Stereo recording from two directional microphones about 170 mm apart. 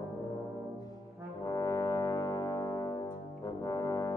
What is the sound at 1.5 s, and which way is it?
Brass instrument, 20° left (ahead or behind).